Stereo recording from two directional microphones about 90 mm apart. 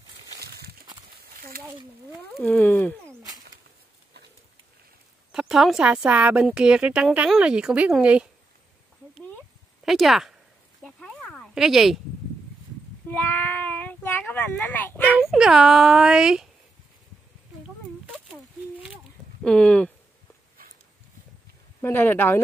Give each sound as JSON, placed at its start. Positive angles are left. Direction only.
{"t": 2.4, "sound": "speech", "side_deg": 15}
{"t": 5.3, "sound": "speech", "side_deg": -5}
{"t": 6.0, "sound": "speech", "side_deg": -15}
{"t": 9.8, "sound": "speech", "side_deg": 0}
{"t": 10.8, "sound": "a sound", "side_deg": 10}
{"t": 11.5, "sound": "speech", "side_deg": -5}
{"t": 13.1, "sound": "child singing", "side_deg": 20}
{"t": 15.1, "sound": "speech", "side_deg": -10}
{"t": 19.4, "sound": "speech", "side_deg": 10}
{"t": 21.8, "sound": "speech", "side_deg": 20}